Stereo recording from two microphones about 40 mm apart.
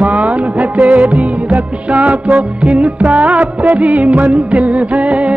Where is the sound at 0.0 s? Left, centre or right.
Right.